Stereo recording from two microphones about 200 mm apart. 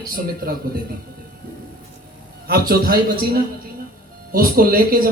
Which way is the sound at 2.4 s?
50° right (ahead or behind).